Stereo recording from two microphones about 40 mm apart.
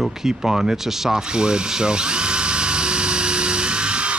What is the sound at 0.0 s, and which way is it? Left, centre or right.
Tools, centre.